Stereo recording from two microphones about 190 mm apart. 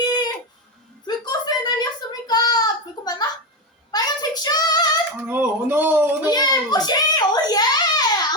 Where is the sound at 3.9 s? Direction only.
20° left (ahead or behind).